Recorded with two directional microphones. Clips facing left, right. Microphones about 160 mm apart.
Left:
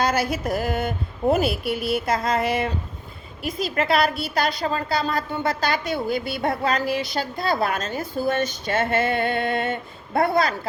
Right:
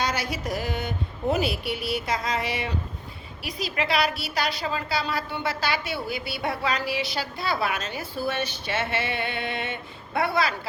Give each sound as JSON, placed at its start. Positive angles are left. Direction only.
{"t": 0.0, "sound": "a woman's voice", "side_deg": 50}